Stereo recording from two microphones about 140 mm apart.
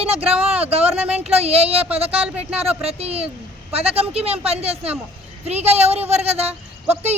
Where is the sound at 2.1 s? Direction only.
10° right (ahead or behind).